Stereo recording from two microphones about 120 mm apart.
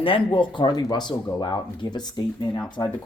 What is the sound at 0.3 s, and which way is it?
Speech, 40° left (ahead or behind).